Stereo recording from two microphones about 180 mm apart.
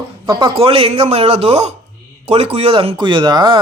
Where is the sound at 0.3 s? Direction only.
30° right (ahead or behind).